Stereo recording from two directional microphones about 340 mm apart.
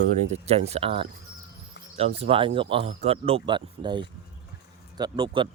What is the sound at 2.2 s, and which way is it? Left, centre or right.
Speech, centre.